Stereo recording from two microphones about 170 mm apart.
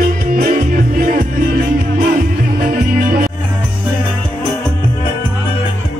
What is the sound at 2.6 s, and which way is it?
Music, 55° right (ahead or behind).